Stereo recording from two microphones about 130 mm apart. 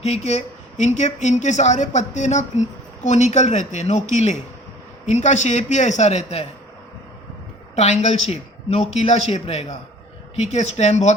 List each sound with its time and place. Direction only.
0.0 s speech: 55° left (ahead or behind)
7.8 s speech: 60° left (ahead or behind)